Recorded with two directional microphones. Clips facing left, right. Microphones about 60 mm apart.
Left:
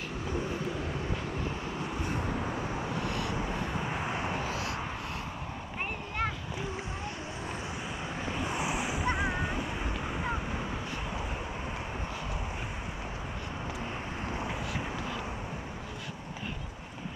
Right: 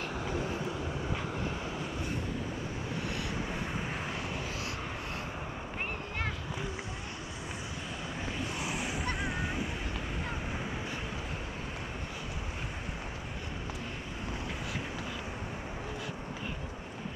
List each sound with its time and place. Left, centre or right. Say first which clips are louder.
3.9 s vehicle: left 4 dB; left
8.5 s vehicle: left 4 dB; centre